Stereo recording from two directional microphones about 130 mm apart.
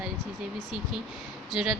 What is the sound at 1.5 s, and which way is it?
Speech, 5° right (ahead or behind).